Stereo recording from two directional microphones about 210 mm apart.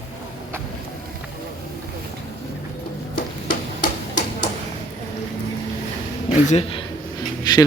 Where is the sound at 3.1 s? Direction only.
40° left (ahead or behind).